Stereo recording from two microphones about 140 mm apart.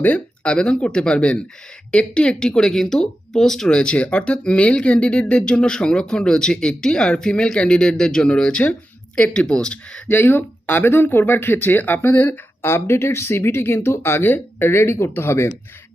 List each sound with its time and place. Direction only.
0.0 s speech: 10° left (ahead or behind)